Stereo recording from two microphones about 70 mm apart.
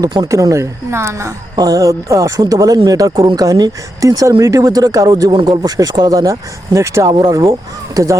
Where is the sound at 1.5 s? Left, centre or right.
Right.